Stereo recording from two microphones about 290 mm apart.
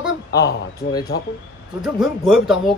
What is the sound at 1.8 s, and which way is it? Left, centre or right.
Speech, centre.